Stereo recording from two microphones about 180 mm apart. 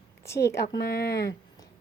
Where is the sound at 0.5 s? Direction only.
65° left (ahead or behind).